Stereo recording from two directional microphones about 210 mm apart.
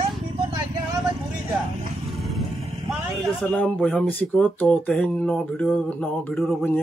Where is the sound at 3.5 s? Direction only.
5° left (ahead or behind).